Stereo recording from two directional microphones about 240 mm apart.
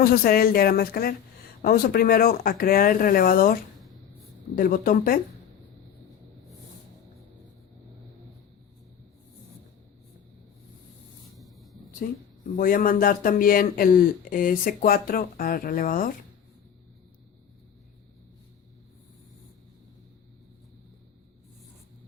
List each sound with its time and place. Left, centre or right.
0.0 s speech: left
11.3 s a sound: centre
12.0 s speech: left